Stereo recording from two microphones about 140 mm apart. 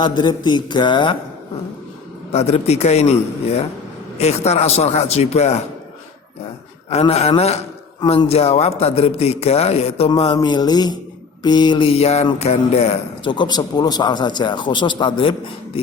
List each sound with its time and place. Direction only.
0.0 s speech: 35° left (ahead or behind)
2.3 s a man's voice: 50° left (ahead or behind)
6.9 s a man's voice: 50° left (ahead or behind)
10.3 s a sound: 30° left (ahead or behind)
11.4 s speech: 30° left (ahead or behind)